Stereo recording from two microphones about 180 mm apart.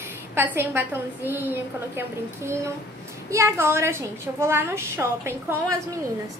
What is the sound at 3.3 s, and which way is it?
A woman's voice, 15° right (ahead or behind).